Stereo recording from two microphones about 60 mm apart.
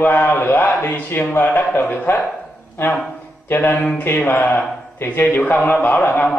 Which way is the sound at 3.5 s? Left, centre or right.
Left.